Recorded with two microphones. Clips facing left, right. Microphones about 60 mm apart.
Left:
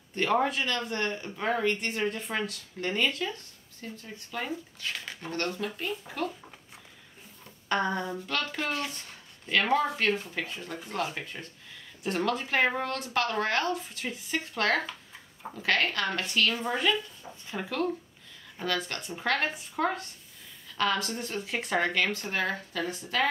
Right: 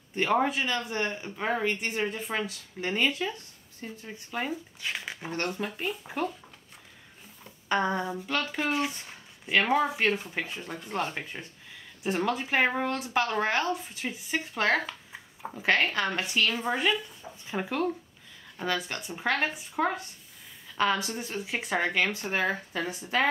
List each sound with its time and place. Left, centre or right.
0.1 s speech: centre
7.6 s speech: centre